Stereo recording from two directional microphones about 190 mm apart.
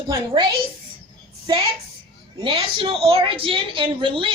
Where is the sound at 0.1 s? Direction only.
20° right (ahead or behind).